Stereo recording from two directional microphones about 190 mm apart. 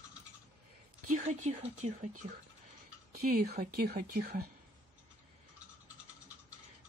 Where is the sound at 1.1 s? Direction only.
40° right (ahead or behind).